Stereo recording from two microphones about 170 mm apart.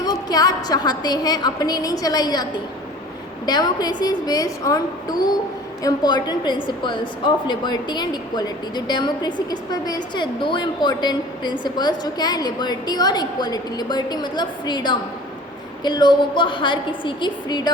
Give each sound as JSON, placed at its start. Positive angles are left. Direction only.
{"t": 0.0, "sound": "a woman's voice", "side_deg": 20}